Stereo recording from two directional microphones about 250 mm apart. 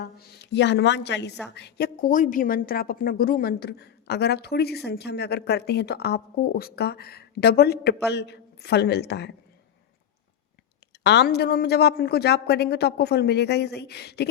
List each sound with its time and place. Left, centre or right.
0.0 s a woman's voice: left
11.0 s speech: left